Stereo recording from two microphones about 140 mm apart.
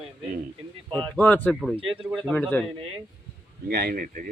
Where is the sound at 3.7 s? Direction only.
90° right.